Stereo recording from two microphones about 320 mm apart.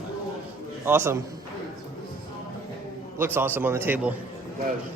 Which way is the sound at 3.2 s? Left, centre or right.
Centre.